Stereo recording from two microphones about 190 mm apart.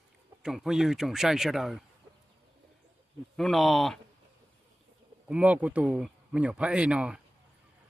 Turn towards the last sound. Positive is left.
turn(degrees=-5)  # may be behind; listen again after turning